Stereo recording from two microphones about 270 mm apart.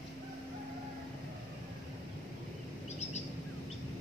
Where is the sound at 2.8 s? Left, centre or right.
Left.